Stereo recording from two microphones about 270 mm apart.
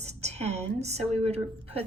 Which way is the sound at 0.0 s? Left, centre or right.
Right.